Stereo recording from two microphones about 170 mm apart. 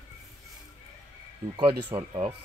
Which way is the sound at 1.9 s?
35° right (ahead or behind).